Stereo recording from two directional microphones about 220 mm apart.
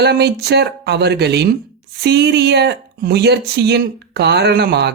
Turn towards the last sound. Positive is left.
turn(degrees=-50)  # may be behind; listen again after turning